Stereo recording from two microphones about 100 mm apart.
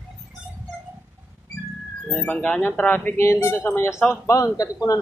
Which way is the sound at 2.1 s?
15° left (ahead or behind).